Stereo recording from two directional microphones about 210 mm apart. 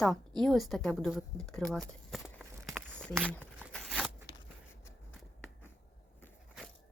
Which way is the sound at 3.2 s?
5° left (ahead or behind).